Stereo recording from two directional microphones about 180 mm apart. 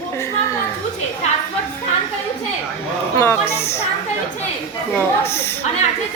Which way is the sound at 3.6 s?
15° left (ahead or behind).